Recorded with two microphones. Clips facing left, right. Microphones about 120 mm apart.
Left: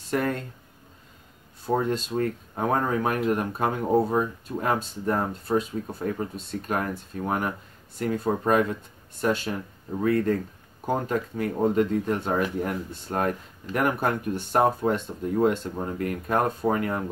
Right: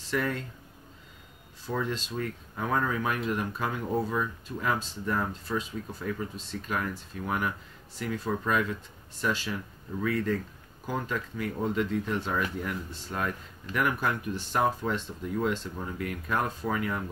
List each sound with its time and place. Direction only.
0.0 s speech: 50° left (ahead or behind)
1.7 s speech: 50° left (ahead or behind)